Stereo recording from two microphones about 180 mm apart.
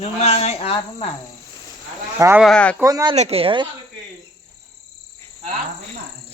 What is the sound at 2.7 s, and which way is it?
Speech, 20° right (ahead or behind).